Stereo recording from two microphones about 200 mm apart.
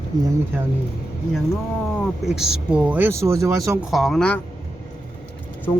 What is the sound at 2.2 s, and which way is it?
Speech, 5° right (ahead or behind).